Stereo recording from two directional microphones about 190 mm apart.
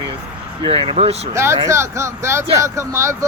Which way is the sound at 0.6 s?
30° right (ahead or behind).